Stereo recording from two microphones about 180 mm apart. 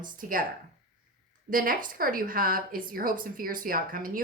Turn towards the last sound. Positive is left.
turn(degrees=-50)  # may be behind; listen again after turning